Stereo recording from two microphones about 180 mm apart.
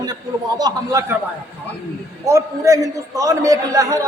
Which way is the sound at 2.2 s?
15° right (ahead or behind).